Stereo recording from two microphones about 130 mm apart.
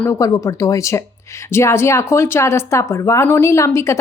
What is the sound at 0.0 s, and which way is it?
Speech, 20° left (ahead or behind).